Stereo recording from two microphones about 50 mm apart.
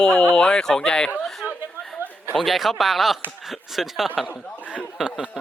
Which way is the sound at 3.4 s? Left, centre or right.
Centre.